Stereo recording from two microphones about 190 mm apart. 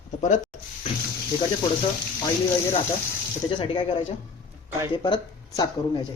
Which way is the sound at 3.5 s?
25° left (ahead or behind).